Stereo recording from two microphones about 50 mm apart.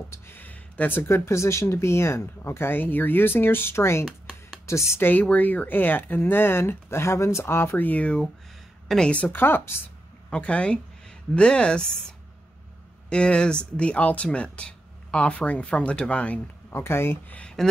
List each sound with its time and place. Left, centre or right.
0.3 s a sound: left
1.0 s speech: left
4.6 s speech: left
5.2 s speech: left
7.4 s speech: left
7.8 s speech: left
8.9 s a woman's voice: centre
9.3 s speech: left
10.3 s speech: left
13.1 s speech: centre
16.7 s speech: left
17.6 s speech: centre